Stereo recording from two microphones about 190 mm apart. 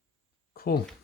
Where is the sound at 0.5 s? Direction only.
55° left (ahead or behind).